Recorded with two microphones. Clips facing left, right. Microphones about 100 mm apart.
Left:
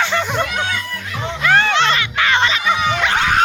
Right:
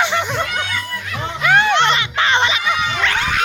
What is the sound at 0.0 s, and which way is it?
Music, 20° right (ahead or behind).